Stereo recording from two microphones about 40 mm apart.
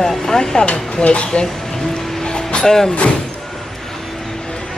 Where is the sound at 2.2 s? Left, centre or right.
Centre.